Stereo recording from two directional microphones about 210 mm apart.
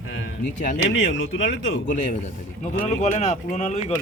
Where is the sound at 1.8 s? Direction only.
35° left (ahead or behind).